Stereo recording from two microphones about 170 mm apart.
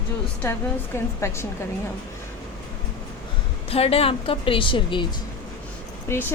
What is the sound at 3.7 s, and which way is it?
A woman's voice, 35° left (ahead or behind).